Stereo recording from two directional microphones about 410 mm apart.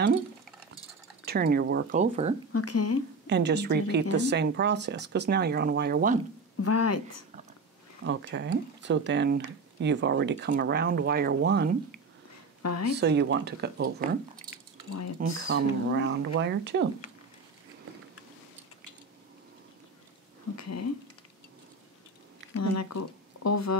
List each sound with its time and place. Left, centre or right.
1.2 s speech: right
2.5 s speech: left
3.3 s speech: right
6.6 s speech: left
8.0 s speech: right
12.6 s speech: left
12.9 s speech: right
15.4 s speech: right
20.5 s speech: left
22.5 s speech: left